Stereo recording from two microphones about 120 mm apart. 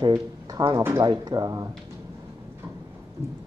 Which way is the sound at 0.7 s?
20° right (ahead or behind).